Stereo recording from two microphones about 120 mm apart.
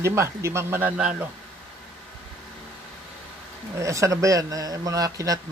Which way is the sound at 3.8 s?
25° right (ahead or behind).